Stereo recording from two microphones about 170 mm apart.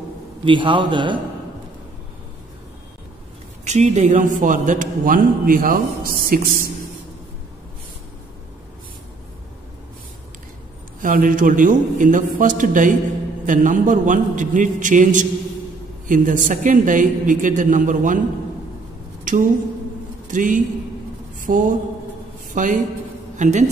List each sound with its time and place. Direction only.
0.5 s a man's voice: 30° right (ahead or behind)
3.6 s a man's voice: 40° right (ahead or behind); by 6.7 s 55° right (ahead or behind)
11.0 s a man's voice: 50° right (ahead or behind)
19.3 s a woman's voice: 50° right (ahead or behind)